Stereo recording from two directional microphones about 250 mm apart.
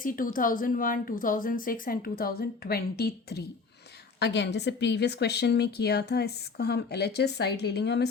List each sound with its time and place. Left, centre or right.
0.0 s speech: left